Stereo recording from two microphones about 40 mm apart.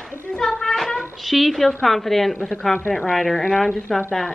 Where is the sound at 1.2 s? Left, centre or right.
Centre.